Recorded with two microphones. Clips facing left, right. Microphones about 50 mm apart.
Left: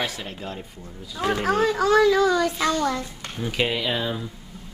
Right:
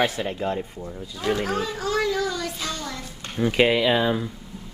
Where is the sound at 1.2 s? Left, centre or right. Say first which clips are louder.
Left 1 dB; left.